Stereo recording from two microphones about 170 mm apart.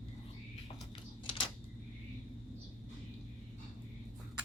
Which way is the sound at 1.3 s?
30° left (ahead or behind).